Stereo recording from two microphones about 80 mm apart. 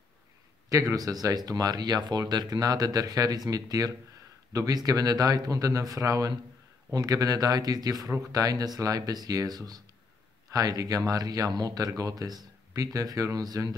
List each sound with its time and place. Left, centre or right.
0.9 s speech: right